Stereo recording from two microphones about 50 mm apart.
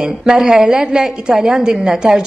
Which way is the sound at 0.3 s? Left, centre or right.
Centre.